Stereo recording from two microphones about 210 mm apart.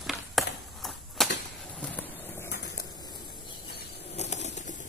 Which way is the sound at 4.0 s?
30° left (ahead or behind).